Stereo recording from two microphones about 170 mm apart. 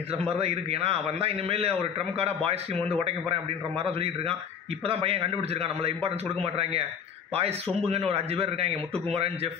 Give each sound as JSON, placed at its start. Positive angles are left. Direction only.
{"t": 0.1, "sound": "a man's voice", "side_deg": -35}